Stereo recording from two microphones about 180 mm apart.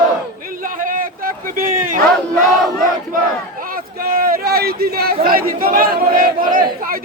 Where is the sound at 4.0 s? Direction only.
55° right (ahead or behind).